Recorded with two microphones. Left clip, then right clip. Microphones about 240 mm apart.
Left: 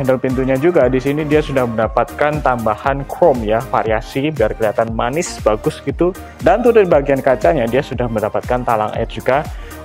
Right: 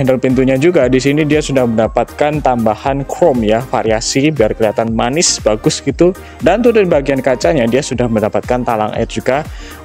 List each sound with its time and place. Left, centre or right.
0.0 s speech: right